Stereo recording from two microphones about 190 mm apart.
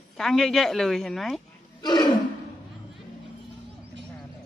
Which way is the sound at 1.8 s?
20° left (ahead or behind).